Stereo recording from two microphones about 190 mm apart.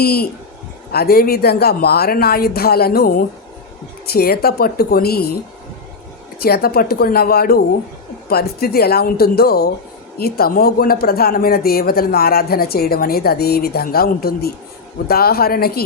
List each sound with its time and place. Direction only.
0.0 s a woman's voice: 55° left (ahead or behind)
6.4 s a woman's voice: 55° left (ahead or behind)